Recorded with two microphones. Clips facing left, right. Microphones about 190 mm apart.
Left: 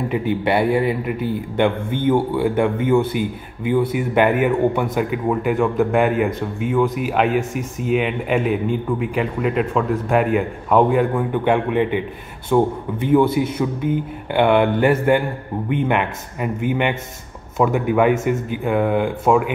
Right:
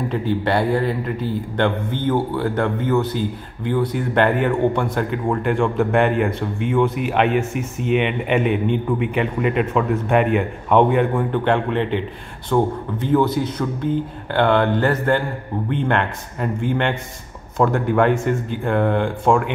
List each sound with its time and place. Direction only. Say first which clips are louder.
0.1 s speech: left 2 dB; 15° left (ahead or behind)
2.3 s a man's voice: left 3 dB; 15° left (ahead or behind)